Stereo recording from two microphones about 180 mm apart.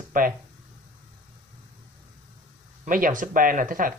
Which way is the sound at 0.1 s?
50° right (ahead or behind).